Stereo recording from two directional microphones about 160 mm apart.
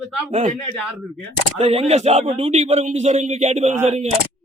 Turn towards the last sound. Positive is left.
turn(degrees=-45)  # may be behind; listen again after turning